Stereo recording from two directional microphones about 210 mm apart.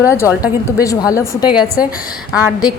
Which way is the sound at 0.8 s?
15° left (ahead or behind).